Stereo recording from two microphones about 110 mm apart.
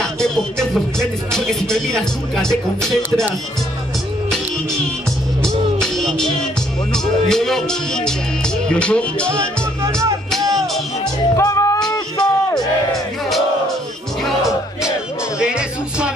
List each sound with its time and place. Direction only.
0.0 s music: 5° left (ahead or behind)
5.8 s music: 5° left (ahead or behind)
6.9 s speech: 5° left (ahead or behind)
9.3 s music: 25° right (ahead or behind)
11.3 s music: 30° left (ahead or behind)
12.5 s music: 5° left (ahead or behind)